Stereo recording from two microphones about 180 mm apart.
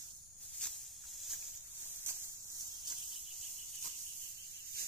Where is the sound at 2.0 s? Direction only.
15° right (ahead or behind).